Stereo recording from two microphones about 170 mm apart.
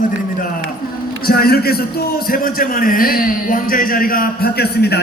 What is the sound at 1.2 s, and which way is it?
A man's voice, 65° left (ahead or behind).